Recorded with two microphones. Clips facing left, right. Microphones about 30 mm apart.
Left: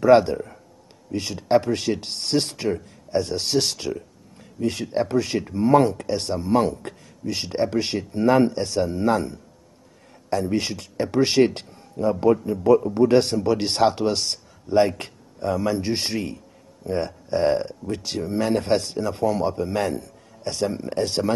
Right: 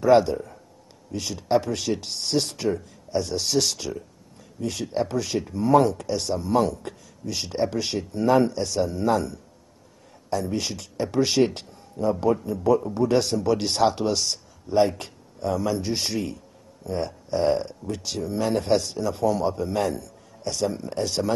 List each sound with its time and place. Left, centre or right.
0.0 s speech: left
10.3 s speech: left
13.9 s speech: centre
16.8 s speech: left
17.4 s speech: centre
17.8 s speech: left
18.9 s speech: centre